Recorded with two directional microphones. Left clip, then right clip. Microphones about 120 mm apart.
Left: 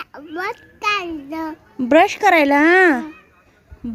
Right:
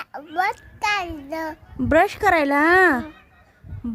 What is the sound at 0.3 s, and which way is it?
A child's voice, 20° right (ahead or behind).